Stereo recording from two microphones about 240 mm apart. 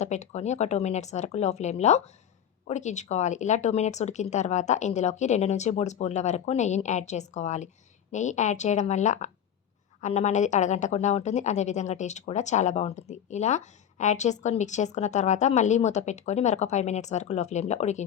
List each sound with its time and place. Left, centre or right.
0.0 s a woman's voice: left